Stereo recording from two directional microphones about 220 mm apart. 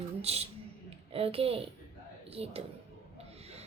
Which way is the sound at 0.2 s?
30° right (ahead or behind).